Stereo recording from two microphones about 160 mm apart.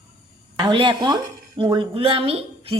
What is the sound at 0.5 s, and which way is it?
A woman's voice, 30° right (ahead or behind).